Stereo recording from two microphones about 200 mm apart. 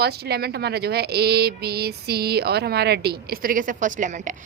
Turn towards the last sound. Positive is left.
turn(degrees=-40)  # may be behind; listen again after turning